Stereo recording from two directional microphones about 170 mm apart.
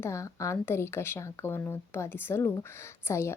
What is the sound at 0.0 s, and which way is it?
Speech, 15° left (ahead or behind).